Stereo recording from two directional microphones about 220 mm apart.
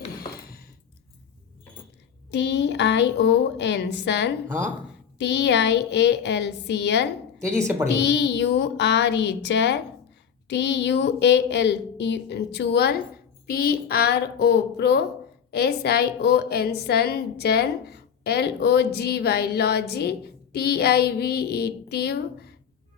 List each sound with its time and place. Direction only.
2.3 s a woman's voice: 50° left (ahead or behind)
7.6 s a woman's voice: 10° right (ahead or behind)
7.9 s a woman's voice: 50° left (ahead or behind)